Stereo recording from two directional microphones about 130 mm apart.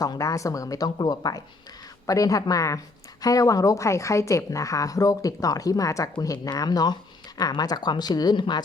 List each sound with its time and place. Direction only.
0.0 s speech: 25° left (ahead or behind)